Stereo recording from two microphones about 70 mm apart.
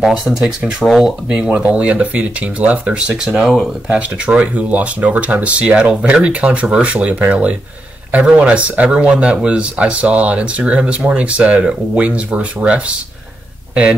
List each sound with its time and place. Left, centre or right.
0.0 s speech: centre
1.3 s speech: centre
3.9 s speech: centre